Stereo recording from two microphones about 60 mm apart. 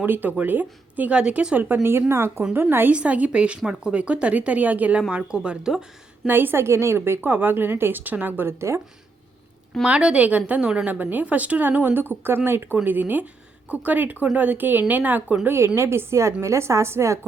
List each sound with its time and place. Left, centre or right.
0.0 s a woman's voice: right
1.2 s speech: centre
1.7 s a woman's voice: right
2.5 s a woman's voice: right
2.9 s speech: right
6.2 s a woman's voice: right
9.8 s speech: centre
10.8 s a woman's voice: right
12.7 s a woman's voice: right
15.4 s a woman's voice: right